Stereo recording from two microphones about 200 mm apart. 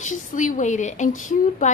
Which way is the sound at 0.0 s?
40° left (ahead or behind).